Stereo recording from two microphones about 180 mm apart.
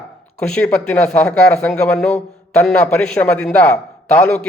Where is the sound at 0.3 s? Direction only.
5° left (ahead or behind).